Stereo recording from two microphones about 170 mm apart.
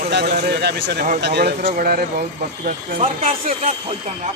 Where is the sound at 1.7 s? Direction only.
60° right (ahead or behind).